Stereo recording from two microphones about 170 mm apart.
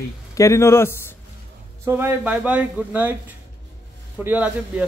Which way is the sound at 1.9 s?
15° right (ahead or behind).